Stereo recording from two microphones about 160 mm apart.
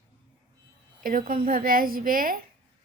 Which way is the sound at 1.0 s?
60° right (ahead or behind).